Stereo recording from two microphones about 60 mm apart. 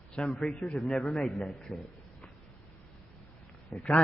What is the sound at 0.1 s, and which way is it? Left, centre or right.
A man's voice, centre.